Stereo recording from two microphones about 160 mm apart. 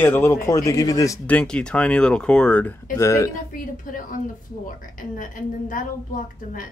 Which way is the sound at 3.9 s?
60° left (ahead or behind).